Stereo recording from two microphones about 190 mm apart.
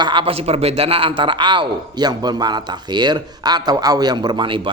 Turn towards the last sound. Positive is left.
turn(degrees=-25)  # may be behind; listen again after turning